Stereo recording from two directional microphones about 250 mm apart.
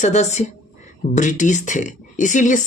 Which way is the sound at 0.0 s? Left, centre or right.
Left.